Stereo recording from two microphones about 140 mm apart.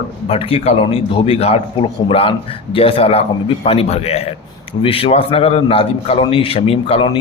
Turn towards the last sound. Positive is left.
turn(degrees=45)  # may be behind; listen again after turning